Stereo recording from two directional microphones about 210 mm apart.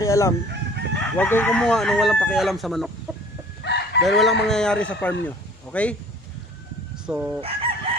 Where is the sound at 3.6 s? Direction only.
55° left (ahead or behind).